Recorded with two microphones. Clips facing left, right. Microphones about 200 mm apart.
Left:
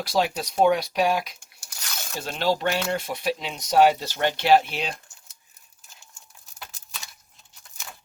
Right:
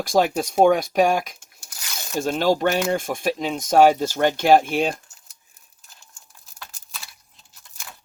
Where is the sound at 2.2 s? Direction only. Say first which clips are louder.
Right 5 dB; 45° right (ahead or behind).